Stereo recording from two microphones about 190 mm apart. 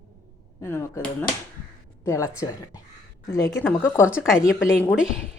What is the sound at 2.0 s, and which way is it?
Speech, 15° left (ahead or behind).